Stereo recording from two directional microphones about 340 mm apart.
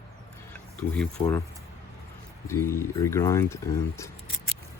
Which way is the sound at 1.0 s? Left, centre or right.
Centre.